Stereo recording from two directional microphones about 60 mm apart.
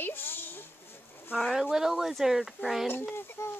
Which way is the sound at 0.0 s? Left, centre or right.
Left.